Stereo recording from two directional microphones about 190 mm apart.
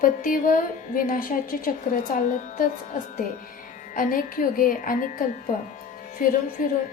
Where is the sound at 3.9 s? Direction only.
45° left (ahead or behind).